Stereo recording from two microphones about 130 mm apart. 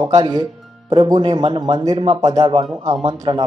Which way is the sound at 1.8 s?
30° right (ahead or behind).